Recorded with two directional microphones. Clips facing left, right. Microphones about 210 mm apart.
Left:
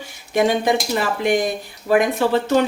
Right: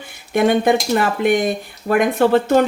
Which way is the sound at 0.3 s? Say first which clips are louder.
Right 3 dB; 55° right (ahead or behind).